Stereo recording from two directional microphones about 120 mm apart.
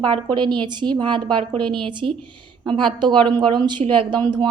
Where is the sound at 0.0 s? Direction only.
40° right (ahead or behind).